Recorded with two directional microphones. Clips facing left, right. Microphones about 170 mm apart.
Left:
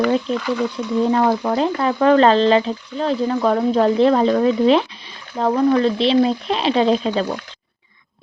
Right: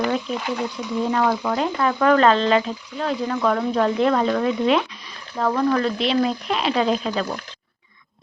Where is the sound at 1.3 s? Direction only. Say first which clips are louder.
Left 4 dB; 30° left (ahead or behind).